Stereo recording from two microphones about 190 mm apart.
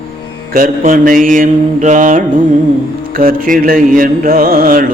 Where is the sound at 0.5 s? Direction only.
45° right (ahead or behind).